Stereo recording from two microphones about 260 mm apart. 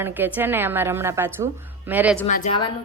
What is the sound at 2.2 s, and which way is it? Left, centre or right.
Speech, left.